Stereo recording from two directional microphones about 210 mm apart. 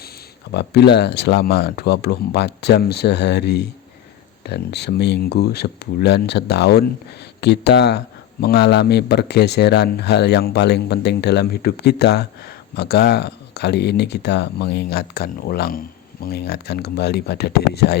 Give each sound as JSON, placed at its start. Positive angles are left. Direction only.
{"t": 0.5, "sound": "speech", "side_deg": 55}